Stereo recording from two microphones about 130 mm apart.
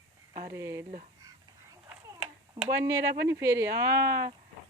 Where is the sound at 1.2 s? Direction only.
30° right (ahead or behind).